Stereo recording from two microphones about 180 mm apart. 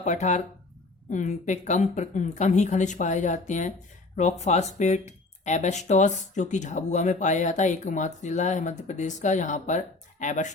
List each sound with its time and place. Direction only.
0.0 s speech: 40° left (ahead or behind)